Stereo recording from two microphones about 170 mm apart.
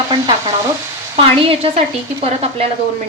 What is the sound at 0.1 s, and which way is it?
Stir, 25° right (ahead or behind).